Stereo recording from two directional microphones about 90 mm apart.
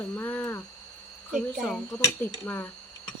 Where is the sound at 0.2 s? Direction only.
25° left (ahead or behind).